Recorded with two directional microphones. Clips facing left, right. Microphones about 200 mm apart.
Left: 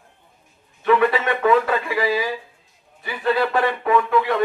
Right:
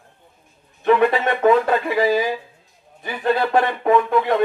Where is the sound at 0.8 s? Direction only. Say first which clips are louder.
Right 2 dB; 40° right (ahead or behind).